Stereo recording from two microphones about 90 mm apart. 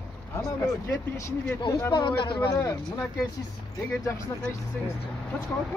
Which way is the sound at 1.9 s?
60° left (ahead or behind).